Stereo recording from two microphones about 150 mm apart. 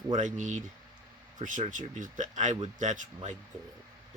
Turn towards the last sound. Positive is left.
turn(degrees=-55)  # may be behind; listen again after turning